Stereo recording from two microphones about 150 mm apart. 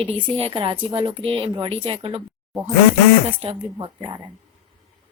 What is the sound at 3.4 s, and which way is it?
Speech, 40° right (ahead or behind).